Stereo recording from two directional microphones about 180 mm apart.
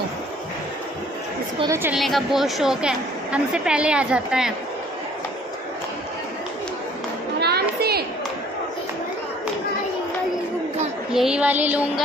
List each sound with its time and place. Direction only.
1.7 s music: 10° right (ahead or behind)
2.0 s a woman's voice: centre (ahead or behind)
7.3 s children playing: 65° right (ahead or behind)
11.1 s music: 5° right (ahead or behind)